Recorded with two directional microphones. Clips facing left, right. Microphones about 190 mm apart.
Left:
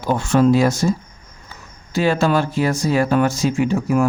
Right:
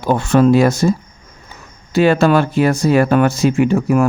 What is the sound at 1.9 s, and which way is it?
Speech, 65° right (ahead or behind).